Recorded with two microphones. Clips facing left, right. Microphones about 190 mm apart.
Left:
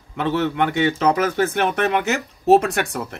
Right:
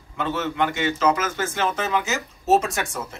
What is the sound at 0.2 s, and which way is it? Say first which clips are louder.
Speech: left 4 dB; 65° left (ahead or behind).